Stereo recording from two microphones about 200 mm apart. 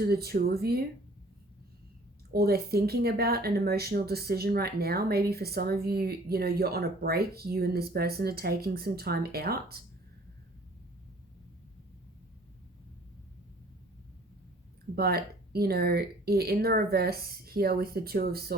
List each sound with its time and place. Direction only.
0.0 s speech: 50° right (ahead or behind)
2.3 s speech: 50° right (ahead or behind)
14.9 s speech: 50° right (ahead or behind)